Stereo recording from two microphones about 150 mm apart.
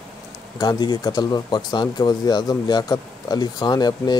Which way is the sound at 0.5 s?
30° left (ahead or behind).